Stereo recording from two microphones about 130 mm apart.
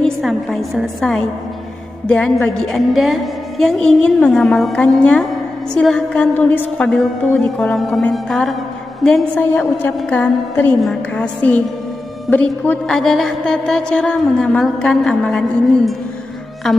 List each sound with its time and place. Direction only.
0.0 s a woman's voice: centre (ahead or behind)